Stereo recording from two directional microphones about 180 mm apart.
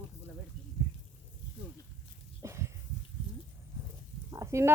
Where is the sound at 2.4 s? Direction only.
15° right (ahead or behind).